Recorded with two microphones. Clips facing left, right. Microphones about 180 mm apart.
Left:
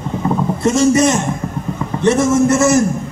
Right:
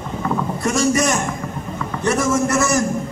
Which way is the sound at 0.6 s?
25° left (ahead or behind).